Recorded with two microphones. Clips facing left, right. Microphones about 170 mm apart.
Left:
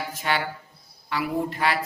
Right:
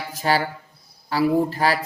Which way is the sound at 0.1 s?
35° right (ahead or behind).